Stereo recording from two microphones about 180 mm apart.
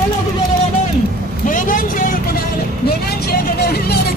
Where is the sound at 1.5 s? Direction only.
45° left (ahead or behind).